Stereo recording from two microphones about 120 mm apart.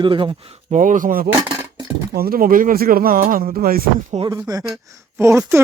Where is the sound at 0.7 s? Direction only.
90° right.